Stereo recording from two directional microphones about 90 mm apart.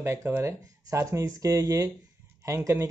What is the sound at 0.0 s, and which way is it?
Speech, 35° right (ahead or behind).